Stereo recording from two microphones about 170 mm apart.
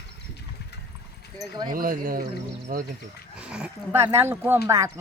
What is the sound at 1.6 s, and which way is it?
Speech, 55° right (ahead or behind).